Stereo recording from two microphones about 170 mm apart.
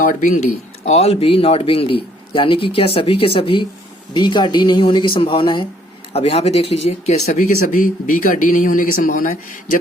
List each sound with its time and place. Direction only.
0.0 s speech: 50° left (ahead or behind)
7.3 s speech: 50° left (ahead or behind)